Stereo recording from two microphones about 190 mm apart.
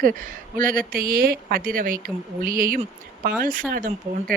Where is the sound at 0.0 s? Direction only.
45° right (ahead or behind).